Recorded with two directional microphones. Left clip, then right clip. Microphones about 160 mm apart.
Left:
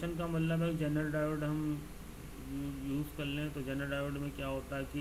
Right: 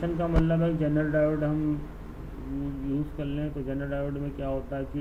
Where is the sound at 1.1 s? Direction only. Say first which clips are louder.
Right 10 dB; 30° left (ahead or behind).